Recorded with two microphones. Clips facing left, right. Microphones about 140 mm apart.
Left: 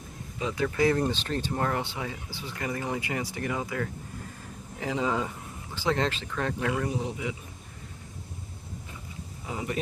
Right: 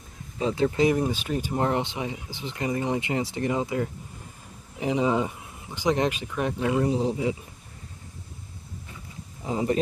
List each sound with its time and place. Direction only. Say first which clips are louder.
0.3 s speech: right 4 dB; 30° right (ahead or behind); by 1.5 s 10° right (ahead or behind)
1.5 s speech: right 6 dB; 20° right (ahead or behind)
9.4 s speech: right 8 dB; 35° right (ahead or behind)